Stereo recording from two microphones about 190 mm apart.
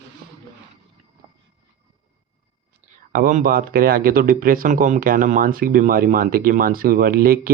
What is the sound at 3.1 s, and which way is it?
Speech, 50° right (ahead or behind).